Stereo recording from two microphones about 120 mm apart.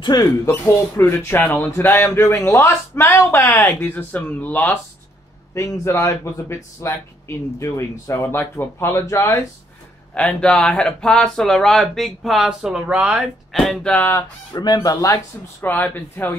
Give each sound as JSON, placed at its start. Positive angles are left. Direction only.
{"t": 0.0, "sound": "speech", "side_deg": 35}
{"t": 0.7, "sound": "speech", "side_deg": 20}
{"t": 3.5, "sound": "speech", "side_deg": 15}
{"t": 5.5, "sound": "speech", "side_deg": 25}
{"t": 10.1, "sound": "speech", "side_deg": 5}
{"t": 13.5, "sound": "speech", "side_deg": 0}
{"t": 13.9, "sound": "speech", "side_deg": 20}
{"t": 14.5, "sound": "speech", "side_deg": 35}
{"t": 15.6, "sound": "speech", "side_deg": 15}